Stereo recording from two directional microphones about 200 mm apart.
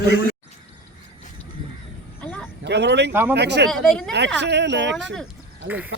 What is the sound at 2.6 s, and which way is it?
Speech, 60° right (ahead or behind).